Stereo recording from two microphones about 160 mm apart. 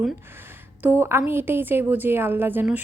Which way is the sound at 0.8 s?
15° right (ahead or behind).